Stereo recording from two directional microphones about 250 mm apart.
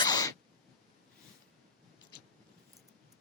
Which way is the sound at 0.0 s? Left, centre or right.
Centre.